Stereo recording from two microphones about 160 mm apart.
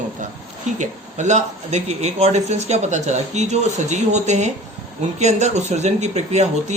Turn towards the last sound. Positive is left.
turn(degrees=-45)  # may be behind; listen again after turning